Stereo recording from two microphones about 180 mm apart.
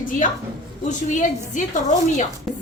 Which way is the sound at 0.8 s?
45° left (ahead or behind).